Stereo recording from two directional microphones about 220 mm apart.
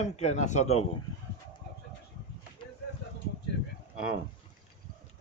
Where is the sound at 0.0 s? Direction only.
30° left (ahead or behind).